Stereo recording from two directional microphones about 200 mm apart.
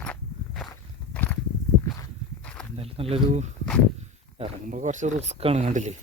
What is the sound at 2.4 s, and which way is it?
Walk, 5° left (ahead or behind).